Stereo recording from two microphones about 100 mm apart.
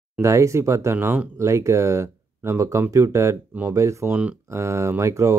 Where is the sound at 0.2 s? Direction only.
30° right (ahead or behind).